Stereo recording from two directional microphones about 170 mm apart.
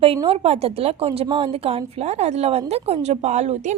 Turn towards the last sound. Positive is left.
turn(degrees=-40)  # may be behind; listen again after turning